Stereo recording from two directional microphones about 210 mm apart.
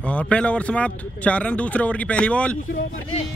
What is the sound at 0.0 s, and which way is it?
Speech, 5° left (ahead or behind).